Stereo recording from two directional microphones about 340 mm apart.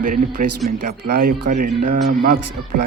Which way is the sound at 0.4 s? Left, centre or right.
Right.